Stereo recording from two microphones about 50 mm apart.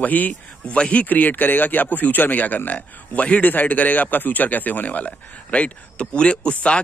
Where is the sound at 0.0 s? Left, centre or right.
Left.